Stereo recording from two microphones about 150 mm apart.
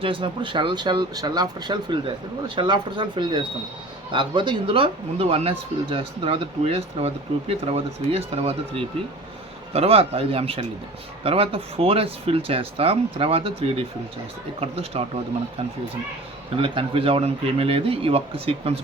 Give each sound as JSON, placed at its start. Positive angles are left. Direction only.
{"t": 0.0, "sound": "speech", "side_deg": -35}